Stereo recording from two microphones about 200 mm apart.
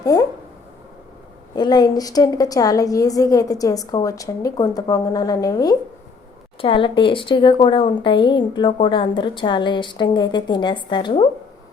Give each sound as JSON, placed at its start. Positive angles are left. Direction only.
{"t": 0.0, "sound": "speech", "side_deg": 15}
{"t": 1.5, "sound": "a woman's voice", "side_deg": 20}